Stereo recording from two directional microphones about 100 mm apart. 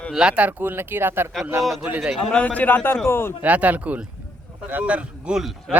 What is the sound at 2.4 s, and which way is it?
Speech, 15° left (ahead or behind).